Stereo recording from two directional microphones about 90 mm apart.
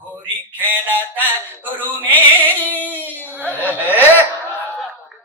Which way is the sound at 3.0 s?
20° left (ahead or behind).